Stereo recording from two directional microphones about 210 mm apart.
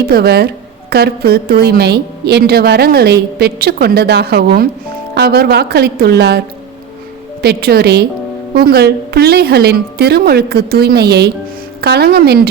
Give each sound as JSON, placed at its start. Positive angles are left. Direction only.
{"t": 0.1, "sound": "a woman's voice", "side_deg": -50}
{"t": 7.4, "sound": "a woman's voice", "side_deg": -50}